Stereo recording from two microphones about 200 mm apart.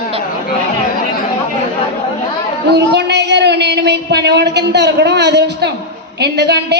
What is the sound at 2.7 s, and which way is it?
A woman's voice, 60° right (ahead or behind).